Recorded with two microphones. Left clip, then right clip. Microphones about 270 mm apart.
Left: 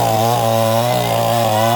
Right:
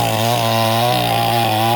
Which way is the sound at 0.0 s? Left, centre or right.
Centre.